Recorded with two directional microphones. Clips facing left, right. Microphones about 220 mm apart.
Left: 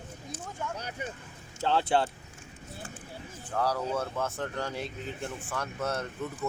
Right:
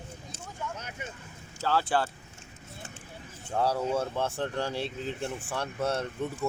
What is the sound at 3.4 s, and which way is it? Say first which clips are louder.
Speech: right 2 dB; 25° right (ahead or behind).